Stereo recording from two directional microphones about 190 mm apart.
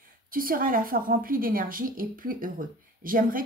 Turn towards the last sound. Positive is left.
turn(degrees=-50)  # may be behind; listen again after turning